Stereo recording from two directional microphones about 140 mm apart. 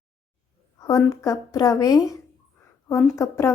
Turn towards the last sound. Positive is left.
turn(degrees=20)  # may be behind; listen again after turning